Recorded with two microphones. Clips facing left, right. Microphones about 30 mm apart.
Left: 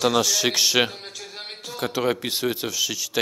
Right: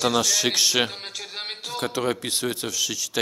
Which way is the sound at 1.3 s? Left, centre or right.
Right.